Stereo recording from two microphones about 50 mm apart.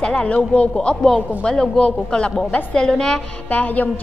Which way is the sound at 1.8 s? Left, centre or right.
Left.